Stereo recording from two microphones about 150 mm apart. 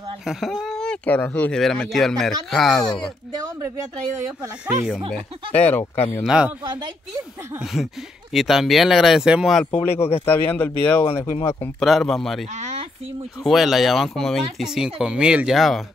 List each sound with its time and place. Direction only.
0.2 s speech: centre (ahead or behind)
4.4 s speech: 5° right (ahead or behind)
5.1 s speech: 10° left (ahead or behind)
6.2 s speech: 5° right (ahead or behind)
6.6 s speech: 30° right (ahead or behind)
7.5 s speech: centre (ahead or behind)
9.9 s speech: 45° left (ahead or behind)
10.2 s speech: 15° left (ahead or behind)